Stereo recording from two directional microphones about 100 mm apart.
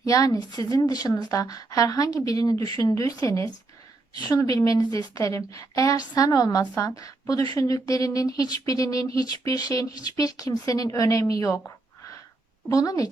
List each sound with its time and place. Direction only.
0.0 s a woman's voice: 35° left (ahead or behind)
12.7 s a woman's voice: 35° left (ahead or behind)